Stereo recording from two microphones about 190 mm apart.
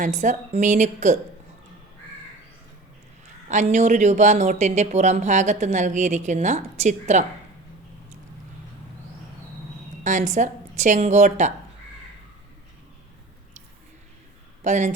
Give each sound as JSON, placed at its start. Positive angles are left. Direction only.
{"t": 0.0, "sound": "speech", "side_deg": -40}
{"t": 3.5, "sound": "speech", "side_deg": -40}
{"t": 10.0, "sound": "speech", "side_deg": -40}
{"t": 14.6, "sound": "speech", "side_deg": -40}